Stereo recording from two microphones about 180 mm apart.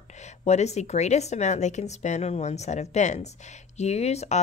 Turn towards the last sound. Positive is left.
turn(degrees=35)  # may be behind; listen again after turning